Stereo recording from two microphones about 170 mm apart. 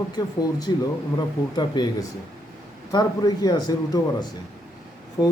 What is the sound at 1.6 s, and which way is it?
Speech, 25° left (ahead or behind).